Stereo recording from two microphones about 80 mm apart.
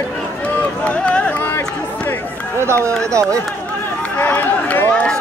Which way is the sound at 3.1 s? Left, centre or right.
Right.